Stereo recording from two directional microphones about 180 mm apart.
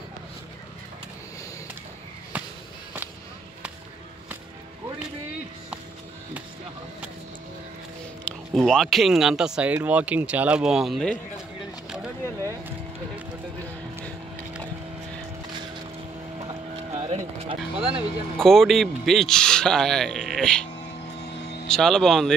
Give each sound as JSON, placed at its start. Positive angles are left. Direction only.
{"t": 2.3, "sound": "a sound", "side_deg": -10}
{"t": 8.3, "sound": "speech", "side_deg": 5}
{"t": 16.3, "sound": "a sound", "side_deg": -35}
{"t": 18.4, "sound": "speech", "side_deg": 0}
{"t": 21.2, "sound": "vehicle", "side_deg": 65}
{"t": 21.6, "sound": "speech", "side_deg": 5}